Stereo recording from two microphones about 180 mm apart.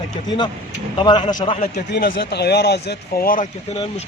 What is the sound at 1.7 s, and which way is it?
Speech, 65° left (ahead or behind).